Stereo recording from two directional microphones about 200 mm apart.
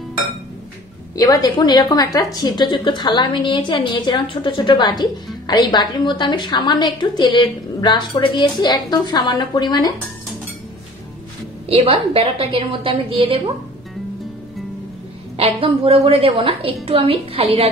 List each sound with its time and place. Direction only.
1.1 s a woman's voice: 20° left (ahead or behind)
11.7 s a woman's voice: 30° right (ahead or behind)
15.3 s a woman's voice: 30° right (ahead or behind)